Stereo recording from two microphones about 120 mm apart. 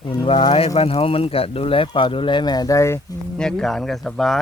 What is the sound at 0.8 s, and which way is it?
Speech, 55° left (ahead or behind).